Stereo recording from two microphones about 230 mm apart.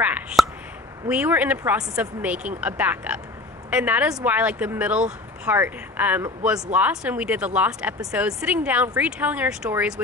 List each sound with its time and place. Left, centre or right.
0.0 s speech: centre